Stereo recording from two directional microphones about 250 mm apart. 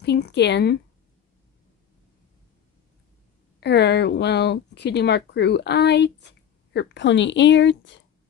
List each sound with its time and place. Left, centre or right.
0.0 s speech: left
3.6 s speech: left